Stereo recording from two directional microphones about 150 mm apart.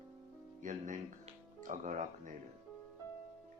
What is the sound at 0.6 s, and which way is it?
Speech, 55° right (ahead or behind).